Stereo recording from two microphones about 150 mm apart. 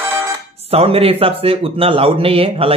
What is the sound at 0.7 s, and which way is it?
Speech, 40° right (ahead or behind).